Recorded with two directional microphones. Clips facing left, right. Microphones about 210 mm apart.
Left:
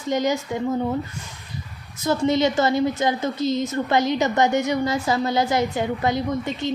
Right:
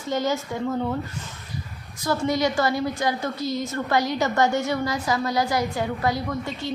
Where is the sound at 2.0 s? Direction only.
20° left (ahead or behind).